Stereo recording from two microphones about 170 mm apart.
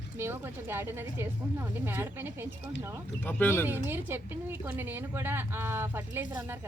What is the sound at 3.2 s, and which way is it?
Speech, 10° left (ahead or behind).